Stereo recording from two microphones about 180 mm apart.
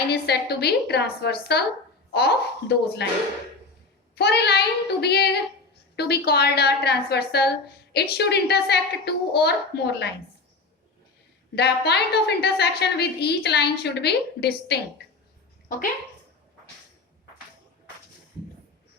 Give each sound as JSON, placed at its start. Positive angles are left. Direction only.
{"t": 0.1, "sound": "a woman's voice", "side_deg": 65}
{"t": 4.1, "sound": "a woman's voice", "side_deg": 65}
{"t": 11.5, "sound": "a woman's voice", "side_deg": 65}